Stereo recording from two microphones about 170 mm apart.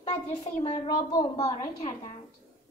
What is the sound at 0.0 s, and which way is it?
Speech, 30° left (ahead or behind).